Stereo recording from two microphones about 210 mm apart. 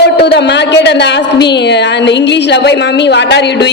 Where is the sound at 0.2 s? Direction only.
50° left (ahead or behind).